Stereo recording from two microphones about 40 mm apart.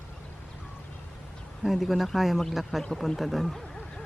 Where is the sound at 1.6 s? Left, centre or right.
Centre.